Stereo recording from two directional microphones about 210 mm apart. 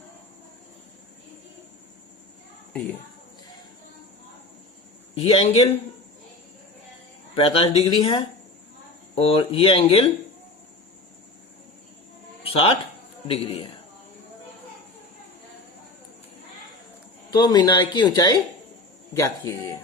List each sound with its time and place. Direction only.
5.1 s speech: 25° left (ahead or behind)
7.3 s speech: 25° left (ahead or behind)
12.4 s a sound: 25° left (ahead or behind)
13.2 s speech: 25° left (ahead or behind)
17.3 s speech: 20° left (ahead or behind)